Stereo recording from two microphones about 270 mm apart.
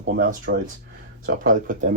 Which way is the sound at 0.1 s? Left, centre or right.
Right.